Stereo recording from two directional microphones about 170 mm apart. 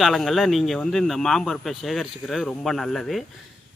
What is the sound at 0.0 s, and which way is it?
Speech, centre (ahead or behind).